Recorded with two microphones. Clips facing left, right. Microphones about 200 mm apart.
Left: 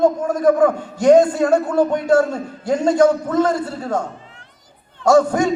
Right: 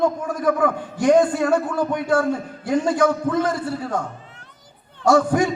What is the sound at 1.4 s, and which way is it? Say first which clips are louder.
Speech: left 3 dB; 40° left (ahead or behind).